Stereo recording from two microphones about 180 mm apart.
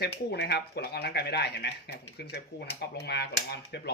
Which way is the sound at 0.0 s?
65° left (ahead or behind).